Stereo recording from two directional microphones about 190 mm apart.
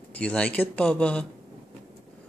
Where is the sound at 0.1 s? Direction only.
5° left (ahead or behind).